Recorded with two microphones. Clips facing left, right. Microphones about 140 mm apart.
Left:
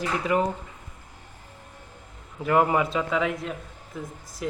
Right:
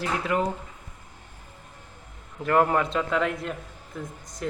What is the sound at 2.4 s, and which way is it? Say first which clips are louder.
A man's voice: even; 5° left (ahead or behind).